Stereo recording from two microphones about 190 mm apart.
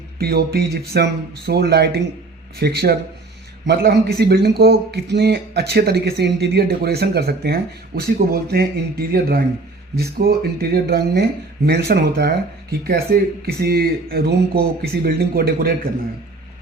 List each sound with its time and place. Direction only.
0.2 s a man's voice: 55° right (ahead or behind)